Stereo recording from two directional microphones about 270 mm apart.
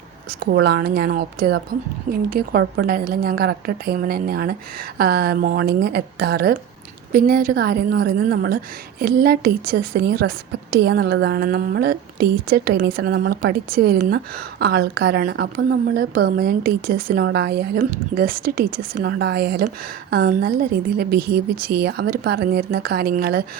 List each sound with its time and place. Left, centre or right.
0.3 s a woman's voice: right